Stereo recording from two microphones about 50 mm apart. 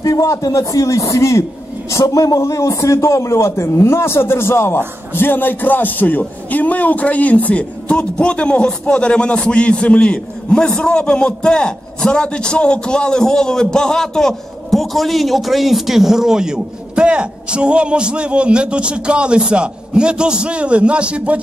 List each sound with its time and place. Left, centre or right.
0.0 s a man's voice: left
7.9 s a man's voice: left; by 21.4 s right